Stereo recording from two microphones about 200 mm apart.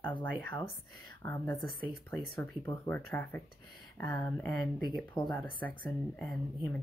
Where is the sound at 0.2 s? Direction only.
10° left (ahead or behind).